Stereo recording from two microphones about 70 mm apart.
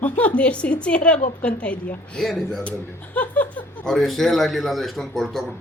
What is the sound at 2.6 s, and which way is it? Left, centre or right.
A man's voice, centre.